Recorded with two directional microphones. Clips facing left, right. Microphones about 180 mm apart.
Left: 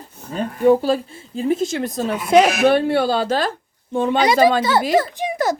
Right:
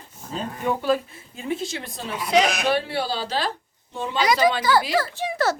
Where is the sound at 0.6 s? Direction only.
35° left (ahead or behind); by 4.1 s 55° left (ahead or behind).